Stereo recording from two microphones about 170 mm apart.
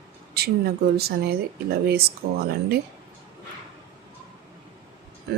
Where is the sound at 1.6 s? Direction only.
65° right (ahead or behind).